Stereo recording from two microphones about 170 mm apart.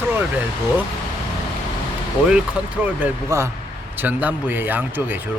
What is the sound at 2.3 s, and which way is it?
Speech, 5° right (ahead or behind).